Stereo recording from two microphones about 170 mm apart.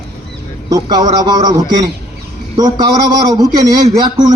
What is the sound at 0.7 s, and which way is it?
Speech, 25° right (ahead or behind).